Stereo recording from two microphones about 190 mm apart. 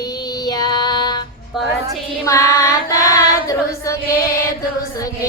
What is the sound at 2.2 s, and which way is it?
Female singing, 15° left (ahead or behind).